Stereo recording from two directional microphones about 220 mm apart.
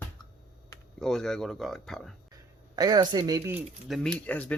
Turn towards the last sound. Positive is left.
turn(degrees=5)  # may be behind; listen again after turning